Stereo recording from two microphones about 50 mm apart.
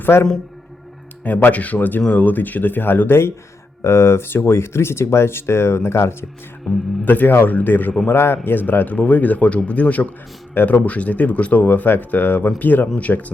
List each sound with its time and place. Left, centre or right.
0.0 s a man's voice: left
1.2 s speech: left
3.8 s speech: left
7.0 s speech: left
8.0 s speech: left